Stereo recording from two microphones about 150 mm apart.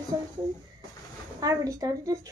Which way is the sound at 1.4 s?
20° right (ahead or behind).